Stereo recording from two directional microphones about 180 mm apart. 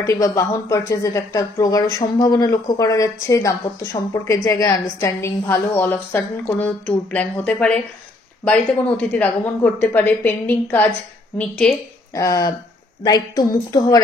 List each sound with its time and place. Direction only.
0.0 s speech: 15° left (ahead or behind)
12.1 s a woman's voice: 15° left (ahead or behind)